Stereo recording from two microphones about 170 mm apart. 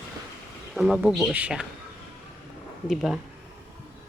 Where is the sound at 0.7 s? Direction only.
5° right (ahead or behind).